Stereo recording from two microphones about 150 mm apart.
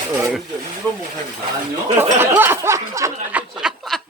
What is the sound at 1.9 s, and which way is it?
Speech, 15° right (ahead or behind).